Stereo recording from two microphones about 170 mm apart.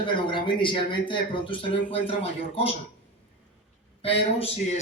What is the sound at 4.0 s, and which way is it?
Speech, 35° left (ahead or behind).